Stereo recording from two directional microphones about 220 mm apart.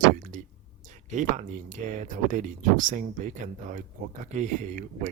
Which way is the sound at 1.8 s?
35° right (ahead or behind).